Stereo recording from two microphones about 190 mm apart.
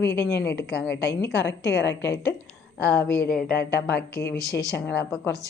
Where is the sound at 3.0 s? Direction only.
55° left (ahead or behind).